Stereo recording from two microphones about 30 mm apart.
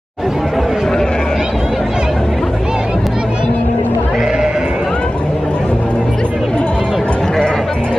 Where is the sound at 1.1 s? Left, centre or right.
Left.